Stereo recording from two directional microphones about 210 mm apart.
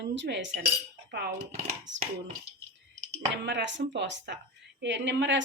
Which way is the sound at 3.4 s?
55° right (ahead or behind).